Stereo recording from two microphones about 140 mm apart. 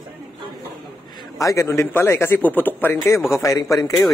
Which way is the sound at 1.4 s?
20° left (ahead or behind).